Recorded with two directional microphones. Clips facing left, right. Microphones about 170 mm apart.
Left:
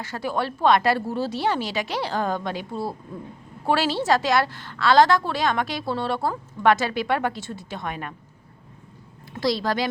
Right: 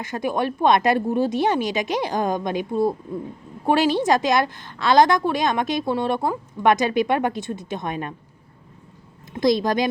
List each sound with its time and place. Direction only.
0.0 s a woman's voice: 15° right (ahead or behind)
9.3 s a woman's voice: 20° right (ahead or behind)